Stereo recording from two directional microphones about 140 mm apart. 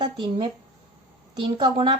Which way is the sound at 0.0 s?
35° right (ahead or behind).